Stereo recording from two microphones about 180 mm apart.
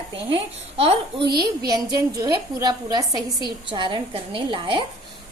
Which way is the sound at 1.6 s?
20° right (ahead or behind).